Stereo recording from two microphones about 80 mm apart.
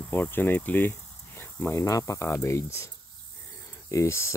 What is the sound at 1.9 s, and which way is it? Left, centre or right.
Speech, left.